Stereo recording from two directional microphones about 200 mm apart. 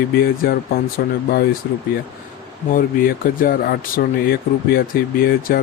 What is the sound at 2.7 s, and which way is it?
Speech, 45° left (ahead or behind).